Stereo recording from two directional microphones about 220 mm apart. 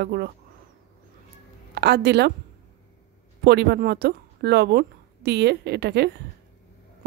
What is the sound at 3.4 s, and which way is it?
A woman's voice, 50° right (ahead or behind).